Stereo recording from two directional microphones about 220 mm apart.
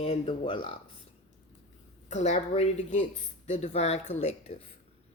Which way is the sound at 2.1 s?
30° left (ahead or behind).